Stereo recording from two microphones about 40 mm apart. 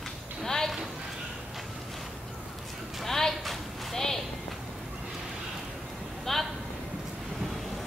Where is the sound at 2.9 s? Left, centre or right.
Centre.